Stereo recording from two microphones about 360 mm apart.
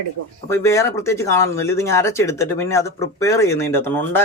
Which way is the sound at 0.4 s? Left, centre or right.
Centre.